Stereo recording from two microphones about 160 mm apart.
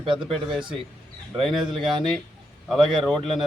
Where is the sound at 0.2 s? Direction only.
Centre (ahead or behind).